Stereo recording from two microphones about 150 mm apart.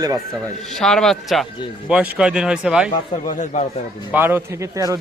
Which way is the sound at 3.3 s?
55° left (ahead or behind).